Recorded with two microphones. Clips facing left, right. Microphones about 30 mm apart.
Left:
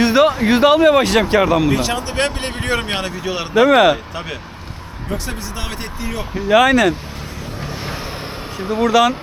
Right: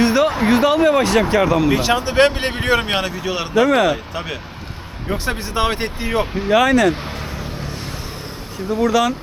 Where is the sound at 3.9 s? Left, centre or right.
Centre.